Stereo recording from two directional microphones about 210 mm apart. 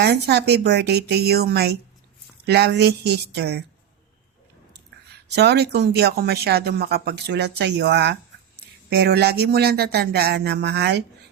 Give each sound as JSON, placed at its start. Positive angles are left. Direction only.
{"t": 0.0, "sound": "speech", "side_deg": -50}
{"t": 5.3, "sound": "speech", "side_deg": -50}